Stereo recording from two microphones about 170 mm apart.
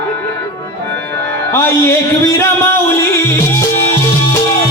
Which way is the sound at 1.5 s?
15° left (ahead or behind).